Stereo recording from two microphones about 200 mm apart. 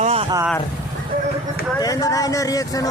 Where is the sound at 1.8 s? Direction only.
15° left (ahead or behind).